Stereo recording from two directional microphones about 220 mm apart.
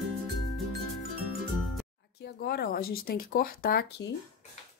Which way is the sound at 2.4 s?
45° left (ahead or behind).